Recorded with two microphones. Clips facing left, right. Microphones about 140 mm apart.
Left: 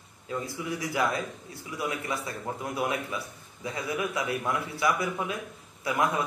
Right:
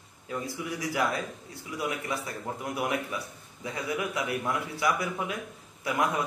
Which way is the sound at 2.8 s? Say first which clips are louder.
Even; 20° left (ahead or behind).